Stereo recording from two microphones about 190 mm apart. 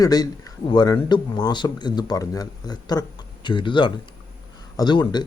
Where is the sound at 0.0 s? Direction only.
20° left (ahead or behind).